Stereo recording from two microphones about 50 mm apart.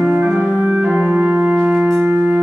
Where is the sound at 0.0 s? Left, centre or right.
Right.